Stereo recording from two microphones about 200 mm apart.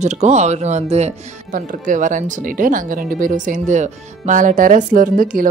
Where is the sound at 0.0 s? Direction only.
35° right (ahead or behind).